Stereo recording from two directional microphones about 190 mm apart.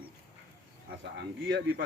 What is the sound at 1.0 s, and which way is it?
Speech, 65° right (ahead or behind).